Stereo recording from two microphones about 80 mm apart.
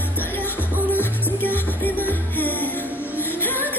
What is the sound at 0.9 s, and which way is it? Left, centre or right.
Music, left.